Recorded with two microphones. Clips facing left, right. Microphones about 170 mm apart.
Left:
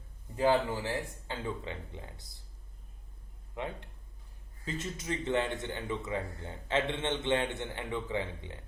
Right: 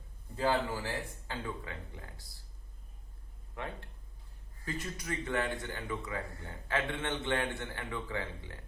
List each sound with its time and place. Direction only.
0.3 s a man's voice: 15° left (ahead or behind)
3.5 s a man's voice: 20° left (ahead or behind)